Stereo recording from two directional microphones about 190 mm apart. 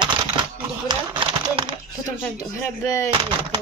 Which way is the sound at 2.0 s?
15° left (ahead or behind).